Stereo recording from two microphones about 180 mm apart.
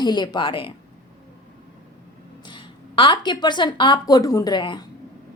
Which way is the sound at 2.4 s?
25° left (ahead or behind).